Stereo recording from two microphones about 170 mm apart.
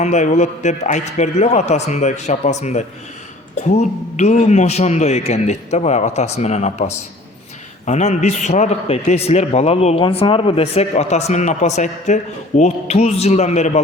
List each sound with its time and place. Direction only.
0.0 s a man's voice: 45° left (ahead or behind)
7.9 s a man's voice: 45° left (ahead or behind)